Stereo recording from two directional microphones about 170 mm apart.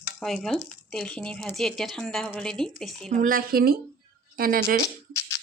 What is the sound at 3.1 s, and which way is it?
Speech, 55° right (ahead or behind).